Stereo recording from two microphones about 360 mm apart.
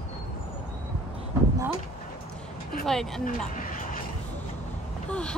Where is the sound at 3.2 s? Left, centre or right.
Left.